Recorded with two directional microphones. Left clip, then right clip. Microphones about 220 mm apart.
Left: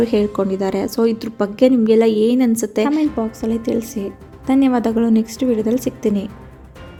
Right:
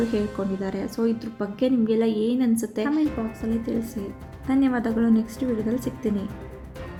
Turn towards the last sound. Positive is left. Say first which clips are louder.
# left 8 dB
turn(degrees=25)  # may be behind; listen again after turning